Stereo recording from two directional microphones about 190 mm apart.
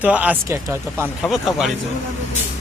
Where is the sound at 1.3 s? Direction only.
Centre (ahead or behind).